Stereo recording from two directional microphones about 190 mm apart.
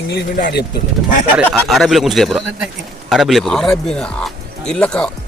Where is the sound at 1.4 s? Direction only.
Centre (ahead or behind).